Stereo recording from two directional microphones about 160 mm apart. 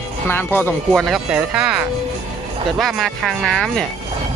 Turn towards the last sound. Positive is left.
turn(degrees=0)  # may be behind; listen again after turning